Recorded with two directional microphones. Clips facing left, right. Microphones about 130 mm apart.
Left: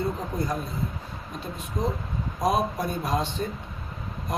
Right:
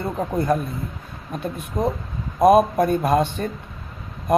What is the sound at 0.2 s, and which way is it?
Speech, 60° right (ahead or behind).